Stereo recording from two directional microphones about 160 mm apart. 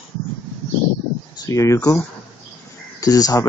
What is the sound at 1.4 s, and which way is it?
Speech, 20° left (ahead or behind).